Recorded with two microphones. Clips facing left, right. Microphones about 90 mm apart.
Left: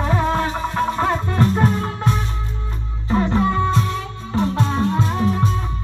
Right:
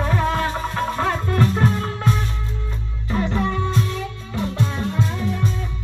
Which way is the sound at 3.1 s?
30° left (ahead or behind).